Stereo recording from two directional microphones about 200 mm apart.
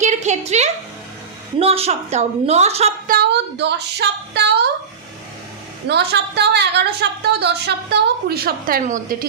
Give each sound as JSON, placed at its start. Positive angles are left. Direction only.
{"t": 0.0, "sound": "a woman's voice", "side_deg": -35}
{"t": 3.1, "sound": "a woman's voice", "side_deg": -55}
{"t": 5.9, "sound": "a woman's voice", "side_deg": -55}